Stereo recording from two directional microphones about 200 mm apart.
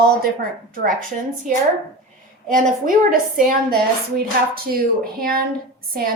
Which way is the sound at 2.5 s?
40° right (ahead or behind).